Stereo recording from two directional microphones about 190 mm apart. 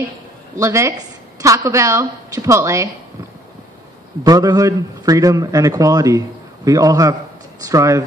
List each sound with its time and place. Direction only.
0.6 s a woman's voice: 15° right (ahead or behind)
4.2 s a man's voice: 20° right (ahead or behind)